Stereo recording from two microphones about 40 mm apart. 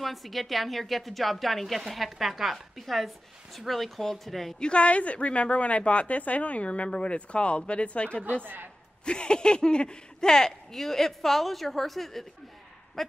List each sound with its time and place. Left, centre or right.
0.0 s a woman's voice: centre
4.6 s a woman's voice: left; by 12.3 s centre